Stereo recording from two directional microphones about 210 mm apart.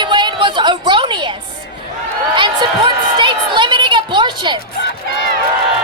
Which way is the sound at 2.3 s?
20° right (ahead or behind).